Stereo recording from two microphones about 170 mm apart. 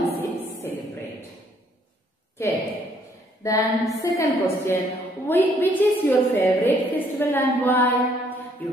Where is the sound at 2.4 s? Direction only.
15° left (ahead or behind).